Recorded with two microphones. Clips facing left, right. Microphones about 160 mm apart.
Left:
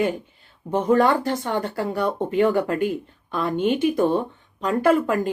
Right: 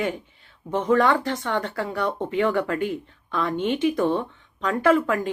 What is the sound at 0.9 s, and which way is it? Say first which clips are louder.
Speech: left 1 dB; 40° left (ahead or behind).